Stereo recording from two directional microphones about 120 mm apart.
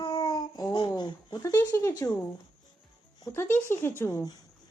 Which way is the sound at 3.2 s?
20° left (ahead or behind).